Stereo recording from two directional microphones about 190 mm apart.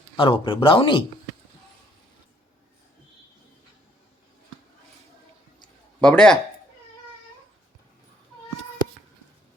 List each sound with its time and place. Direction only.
0.2 s speech: 25° left (ahead or behind)
6.0 s speech: 5° left (ahead or behind)